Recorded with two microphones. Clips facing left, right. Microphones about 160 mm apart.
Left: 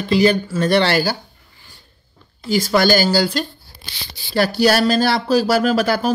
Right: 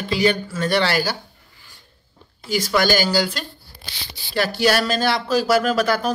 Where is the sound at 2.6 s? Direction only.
35° left (ahead or behind).